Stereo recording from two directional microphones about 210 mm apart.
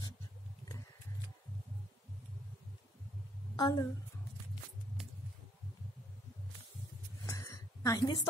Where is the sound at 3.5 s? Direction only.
20° left (ahead or behind).